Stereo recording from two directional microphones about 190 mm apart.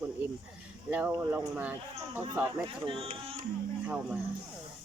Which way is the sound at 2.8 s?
30° right (ahead or behind).